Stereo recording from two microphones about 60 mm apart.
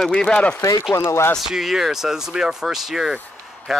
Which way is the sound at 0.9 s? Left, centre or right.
Left.